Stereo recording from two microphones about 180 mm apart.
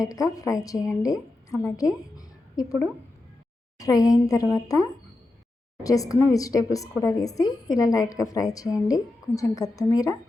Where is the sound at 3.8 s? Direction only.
20° left (ahead or behind).